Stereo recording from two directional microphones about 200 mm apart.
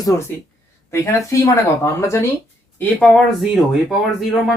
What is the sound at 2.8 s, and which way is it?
Speech, 5° left (ahead or behind).